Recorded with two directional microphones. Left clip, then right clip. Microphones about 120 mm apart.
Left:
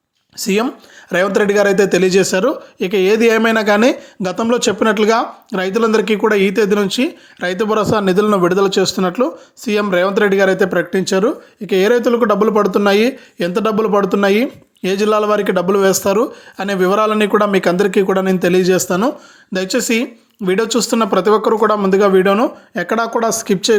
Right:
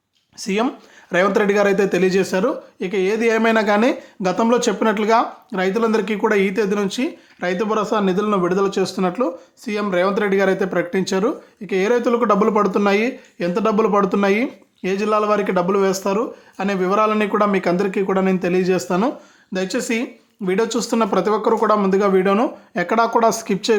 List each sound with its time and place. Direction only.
0.3 s speech: 35° left (ahead or behind)
16.1 s speech: 40° left (ahead or behind)
22.7 s speech: 15° left (ahead or behind)